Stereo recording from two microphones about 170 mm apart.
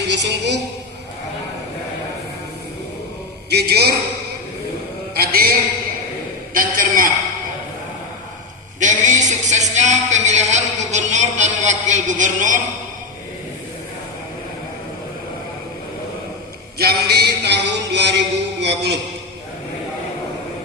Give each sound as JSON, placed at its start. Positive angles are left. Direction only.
{"t": 0.1, "sound": "a woman's voice", "side_deg": -90}
{"t": 3.5, "sound": "speech", "side_deg": -70}
{"t": 5.1, "sound": "a man's voice", "side_deg": -60}
{"t": 8.8, "sound": "speech", "side_deg": -45}
{"t": 16.7, "sound": "a sound", "side_deg": -70}
{"t": 18.6, "sound": "a man's voice", "side_deg": -90}